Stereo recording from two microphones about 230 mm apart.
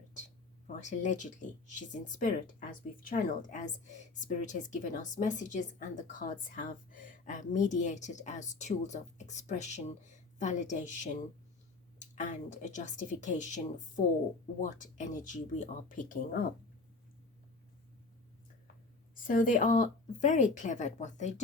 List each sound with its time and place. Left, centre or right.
0.8 s speech: left
19.1 s speech: left